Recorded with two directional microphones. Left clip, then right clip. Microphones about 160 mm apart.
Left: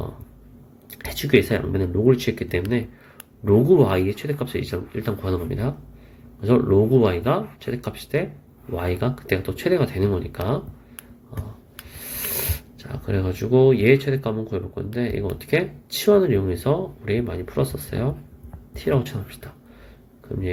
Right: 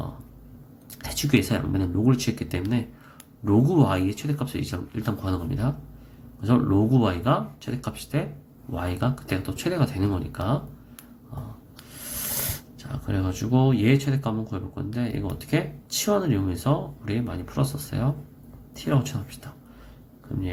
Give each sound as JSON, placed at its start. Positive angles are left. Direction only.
{"t": 0.9, "sound": "speech", "side_deg": 20}
{"t": 12.4, "sound": "speech", "side_deg": 20}